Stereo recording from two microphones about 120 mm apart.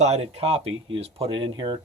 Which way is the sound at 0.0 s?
60° right (ahead or behind).